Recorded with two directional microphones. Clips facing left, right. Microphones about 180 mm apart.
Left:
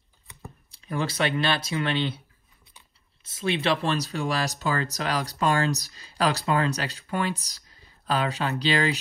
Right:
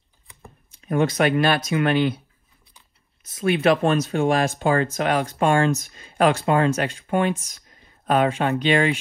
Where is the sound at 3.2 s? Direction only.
25° left (ahead or behind).